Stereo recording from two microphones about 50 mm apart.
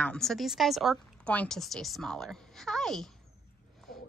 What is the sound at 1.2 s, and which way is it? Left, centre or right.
Speech, left.